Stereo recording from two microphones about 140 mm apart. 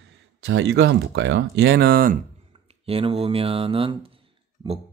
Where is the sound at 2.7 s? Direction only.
45° right (ahead or behind).